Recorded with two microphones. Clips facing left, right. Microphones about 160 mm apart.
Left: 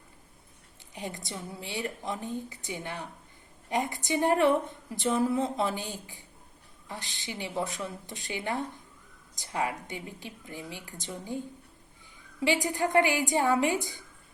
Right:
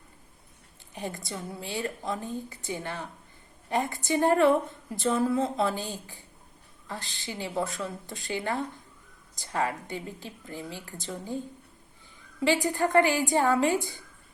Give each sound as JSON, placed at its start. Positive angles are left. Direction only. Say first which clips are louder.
{"t": 0.9, "sound": "a woman's voice", "louder": "right 2 dB", "side_deg": 15}